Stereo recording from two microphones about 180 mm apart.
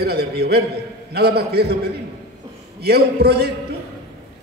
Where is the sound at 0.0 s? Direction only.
60° right (ahead or behind).